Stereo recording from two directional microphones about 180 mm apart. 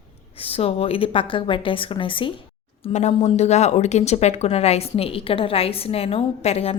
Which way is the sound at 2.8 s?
40° left (ahead or behind).